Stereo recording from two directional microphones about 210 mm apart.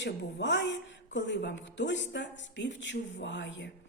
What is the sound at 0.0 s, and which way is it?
Speech, 55° left (ahead or behind).